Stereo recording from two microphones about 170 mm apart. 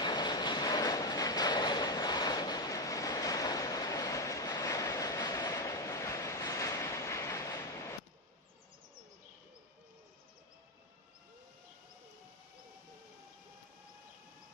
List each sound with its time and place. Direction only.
0.0 s train: 25° left (ahead or behind)